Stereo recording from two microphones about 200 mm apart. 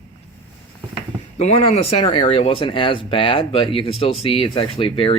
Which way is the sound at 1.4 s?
30° left (ahead or behind).